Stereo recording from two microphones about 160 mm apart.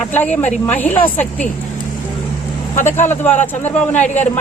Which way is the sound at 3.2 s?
10° left (ahead or behind).